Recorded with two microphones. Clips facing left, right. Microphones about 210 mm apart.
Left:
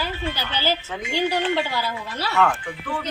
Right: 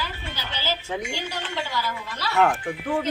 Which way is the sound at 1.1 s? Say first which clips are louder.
Left 10 dB; 60° left (ahead or behind).